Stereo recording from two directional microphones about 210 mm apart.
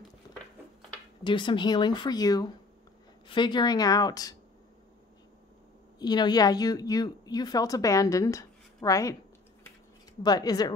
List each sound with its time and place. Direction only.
1.2 s a woman's voice: 25° left (ahead or behind)
5.9 s a woman's voice: 20° left (ahead or behind)
10.2 s a woman's voice: 20° left (ahead or behind)